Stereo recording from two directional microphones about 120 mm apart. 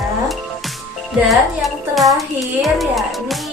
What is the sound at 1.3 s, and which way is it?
A child's voice, centre (ahead or behind).